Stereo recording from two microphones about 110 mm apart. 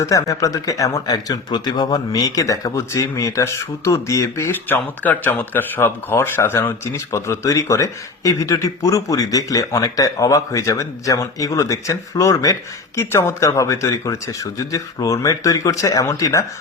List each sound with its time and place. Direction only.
0.0 s speech: 30° left (ahead or behind)